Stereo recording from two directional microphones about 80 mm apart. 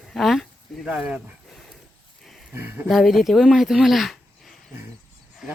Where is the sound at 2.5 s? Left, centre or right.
Right.